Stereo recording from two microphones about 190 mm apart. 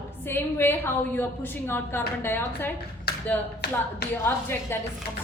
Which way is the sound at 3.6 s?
55° left (ahead or behind).